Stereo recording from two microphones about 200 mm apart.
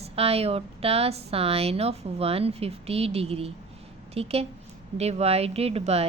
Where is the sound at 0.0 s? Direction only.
30° right (ahead or behind).